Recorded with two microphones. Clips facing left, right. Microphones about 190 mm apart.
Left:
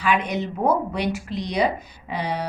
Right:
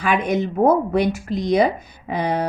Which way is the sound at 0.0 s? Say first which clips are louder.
Right 3 dB; 50° right (ahead or behind).